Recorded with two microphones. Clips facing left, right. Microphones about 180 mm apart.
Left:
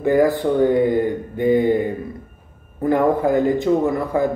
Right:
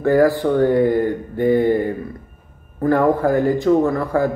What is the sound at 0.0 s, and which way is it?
A man's voice, 20° left (ahead or behind).